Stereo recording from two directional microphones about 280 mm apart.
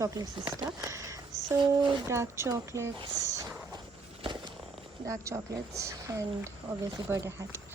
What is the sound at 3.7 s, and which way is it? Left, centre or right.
Walk, centre.